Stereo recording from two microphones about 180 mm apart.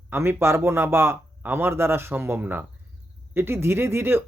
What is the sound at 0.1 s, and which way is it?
Speech, 15° right (ahead or behind).